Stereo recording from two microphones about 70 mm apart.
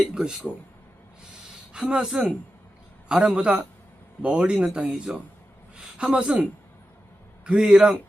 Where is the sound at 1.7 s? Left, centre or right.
Centre.